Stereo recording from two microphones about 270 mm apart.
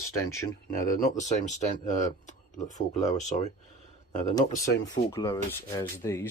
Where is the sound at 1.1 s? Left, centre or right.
Left.